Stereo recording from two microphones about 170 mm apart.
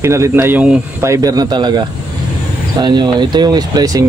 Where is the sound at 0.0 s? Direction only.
15° right (ahead or behind).